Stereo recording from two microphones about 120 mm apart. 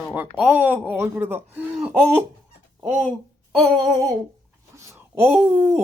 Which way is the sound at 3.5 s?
Centre (ahead or behind).